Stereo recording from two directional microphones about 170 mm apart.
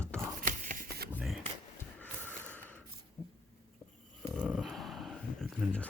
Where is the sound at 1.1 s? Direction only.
Centre (ahead or behind).